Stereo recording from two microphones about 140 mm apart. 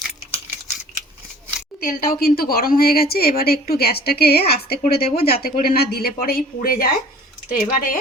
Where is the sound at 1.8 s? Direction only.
90° left.